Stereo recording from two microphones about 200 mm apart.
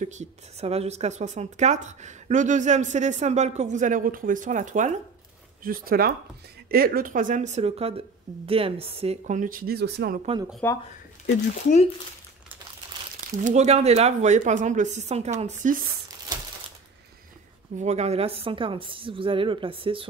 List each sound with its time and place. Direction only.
0.0 s a woman's voice: 35° right (ahead or behind); by 10.2 s 55° right (ahead or behind)
10.6 s speech: 10° left (ahead or behind)
13.3 s a woman's voice: 40° right (ahead or behind)
17.7 s a woman's voice: 35° right (ahead or behind)